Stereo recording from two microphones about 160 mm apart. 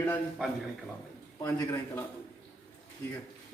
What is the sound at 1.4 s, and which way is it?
Speech, 15° left (ahead or behind).